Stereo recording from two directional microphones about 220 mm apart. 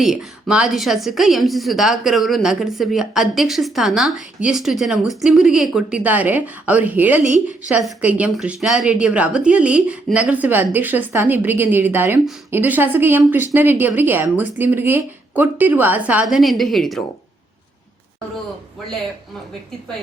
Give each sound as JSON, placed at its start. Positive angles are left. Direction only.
{"t": 0.0, "sound": "a woman's voice", "side_deg": 0}